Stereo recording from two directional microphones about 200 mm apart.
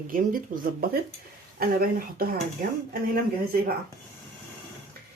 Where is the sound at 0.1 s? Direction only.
45° right (ahead or behind).